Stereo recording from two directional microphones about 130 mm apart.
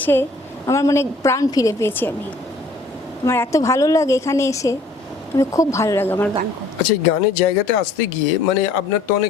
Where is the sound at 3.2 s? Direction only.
20° left (ahead or behind).